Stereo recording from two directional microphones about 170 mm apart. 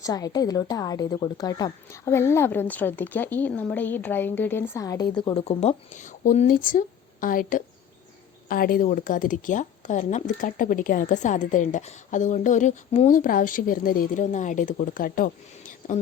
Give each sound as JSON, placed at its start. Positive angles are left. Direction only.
{"t": 0.0, "sound": "a woman's voice", "side_deg": 20}
{"t": 5.3, "sound": "speech", "side_deg": 35}